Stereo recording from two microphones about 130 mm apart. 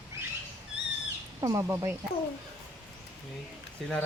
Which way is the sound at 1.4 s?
25° right (ahead or behind).